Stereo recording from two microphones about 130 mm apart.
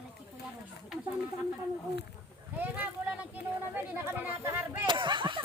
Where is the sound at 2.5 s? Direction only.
15° right (ahead or behind).